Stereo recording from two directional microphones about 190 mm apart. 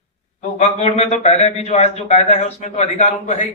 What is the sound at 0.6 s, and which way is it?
Speech, 35° left (ahead or behind).